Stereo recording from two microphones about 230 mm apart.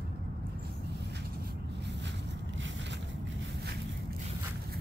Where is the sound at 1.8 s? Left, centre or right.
Right.